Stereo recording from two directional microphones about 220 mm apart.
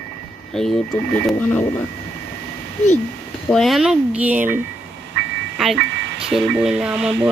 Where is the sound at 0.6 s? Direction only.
Centre (ahead or behind).